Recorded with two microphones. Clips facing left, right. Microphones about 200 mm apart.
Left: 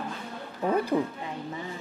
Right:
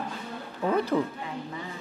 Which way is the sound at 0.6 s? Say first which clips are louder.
Even; 15° left (ahead or behind).